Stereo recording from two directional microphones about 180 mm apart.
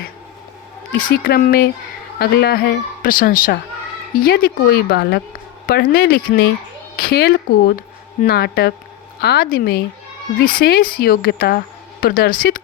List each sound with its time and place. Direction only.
0.9 s a woman's voice: 50° left (ahead or behind)